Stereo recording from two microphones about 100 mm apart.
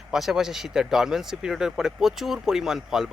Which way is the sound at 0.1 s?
5° right (ahead or behind).